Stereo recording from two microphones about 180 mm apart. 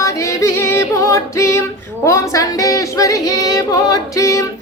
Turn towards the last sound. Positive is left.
turn(degrees=15)  # may be behind; listen again after turning